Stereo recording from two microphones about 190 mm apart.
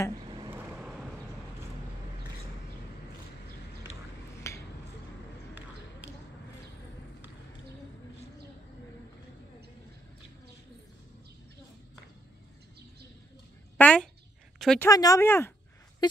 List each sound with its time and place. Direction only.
0.5 s vehicle: 10° right (ahead or behind)
4.4 s finger snapping: 15° left (ahead or behind)
13.7 s a sound: 5° left (ahead or behind)
14.6 s a woman's voice: 5° left (ahead or behind)
14.9 s speech: 20° left (ahead or behind)
16.0 s speech: 20° left (ahead or behind)